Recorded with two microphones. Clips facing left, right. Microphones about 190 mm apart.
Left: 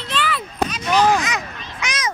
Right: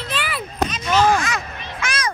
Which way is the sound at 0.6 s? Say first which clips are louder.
Even; 10° left (ahead or behind).